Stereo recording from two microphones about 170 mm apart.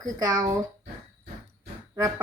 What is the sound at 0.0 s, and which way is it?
Speech, 20° right (ahead or behind).